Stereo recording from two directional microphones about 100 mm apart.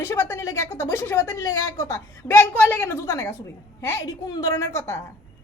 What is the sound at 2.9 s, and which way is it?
A woman's voice, 30° left (ahead or behind).